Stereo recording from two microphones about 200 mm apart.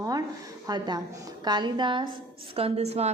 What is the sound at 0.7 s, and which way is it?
A woman's voice, 20° right (ahead or behind).